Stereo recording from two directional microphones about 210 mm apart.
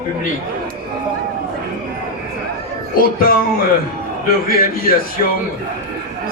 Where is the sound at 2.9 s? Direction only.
45° left (ahead or behind).